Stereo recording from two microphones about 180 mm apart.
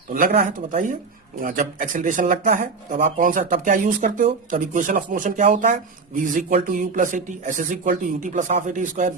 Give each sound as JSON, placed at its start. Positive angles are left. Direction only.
{"t": 0.3, "sound": "speech", "side_deg": -45}